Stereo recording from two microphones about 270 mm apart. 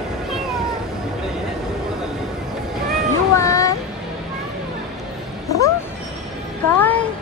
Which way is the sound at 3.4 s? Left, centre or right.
Centre.